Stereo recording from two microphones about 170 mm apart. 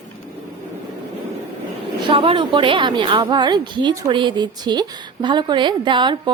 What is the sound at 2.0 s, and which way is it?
Speech, 30° right (ahead or behind).